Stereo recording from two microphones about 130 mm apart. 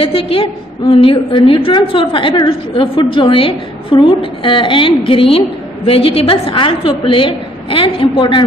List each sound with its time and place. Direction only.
0.0 s a woman's voice: 45° left (ahead or behind)